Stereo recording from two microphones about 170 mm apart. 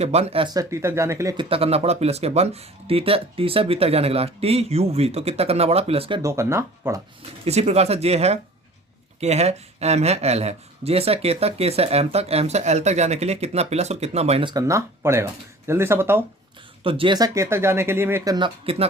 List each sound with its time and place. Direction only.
0.0 s speech: 40° right (ahead or behind); by 1.4 s 15° right (ahead or behind)
1.4 s speech: 35° right (ahead or behind)
6.2 s speech: 15° right (ahead or behind)
7.4 s speech: 40° right (ahead or behind)
14.5 s speech: 15° right (ahead or behind)
16.8 s speech: 30° right (ahead or behind); by 18.3 s 15° right (ahead or behind)
18.3 s speech: 30° right (ahead or behind)